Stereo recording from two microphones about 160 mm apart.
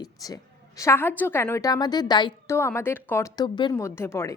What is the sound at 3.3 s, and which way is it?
Speech, 30° left (ahead or behind).